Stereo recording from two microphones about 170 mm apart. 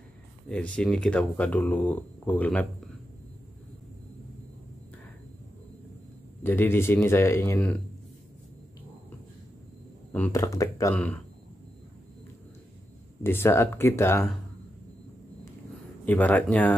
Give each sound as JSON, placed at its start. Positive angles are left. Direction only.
{"t": 0.5, "sound": "speech", "side_deg": 5}
{"t": 6.4, "sound": "speech", "side_deg": 15}
{"t": 10.1, "sound": "speech", "side_deg": 10}
{"t": 13.2, "sound": "speech", "side_deg": 15}
{"t": 16.1, "sound": "speech", "side_deg": 10}